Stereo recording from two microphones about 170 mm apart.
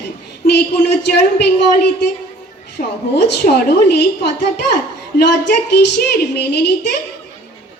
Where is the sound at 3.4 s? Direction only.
75° left (ahead or behind).